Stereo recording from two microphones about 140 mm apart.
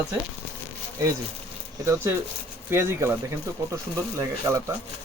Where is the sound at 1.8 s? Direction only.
25° right (ahead or behind).